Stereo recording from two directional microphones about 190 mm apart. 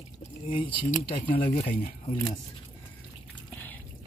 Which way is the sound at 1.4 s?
25° left (ahead or behind).